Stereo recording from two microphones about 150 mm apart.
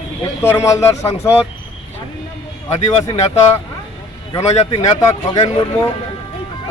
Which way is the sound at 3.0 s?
20° left (ahead or behind).